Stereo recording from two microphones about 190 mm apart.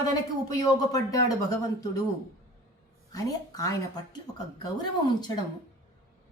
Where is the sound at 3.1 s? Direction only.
20° left (ahead or behind).